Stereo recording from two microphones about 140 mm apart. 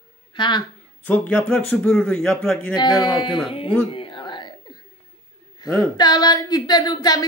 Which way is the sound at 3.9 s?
35° left (ahead or behind).